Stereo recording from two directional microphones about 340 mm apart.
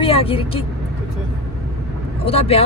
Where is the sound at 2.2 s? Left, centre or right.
Centre.